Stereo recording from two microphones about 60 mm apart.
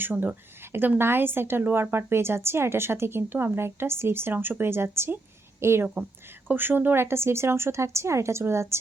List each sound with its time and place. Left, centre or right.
0.0 s a woman's voice: right
6.5 s speech: right